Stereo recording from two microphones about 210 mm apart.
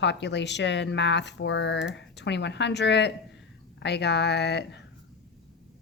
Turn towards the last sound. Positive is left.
turn(degrees=55)  # may be behind; listen again after turning